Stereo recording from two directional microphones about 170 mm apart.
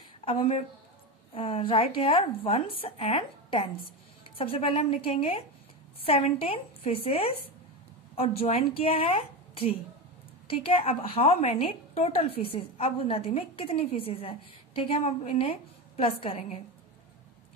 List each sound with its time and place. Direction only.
0.2 s a woman's voice: 35° left (ahead or behind)